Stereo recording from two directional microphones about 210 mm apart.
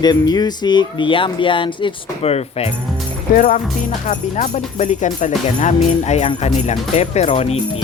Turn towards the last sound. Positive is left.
turn(degrees=30)  # may be behind; listen again after turning